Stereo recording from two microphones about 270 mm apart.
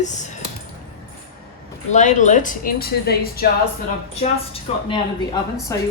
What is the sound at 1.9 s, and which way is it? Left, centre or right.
A woman's voice, left.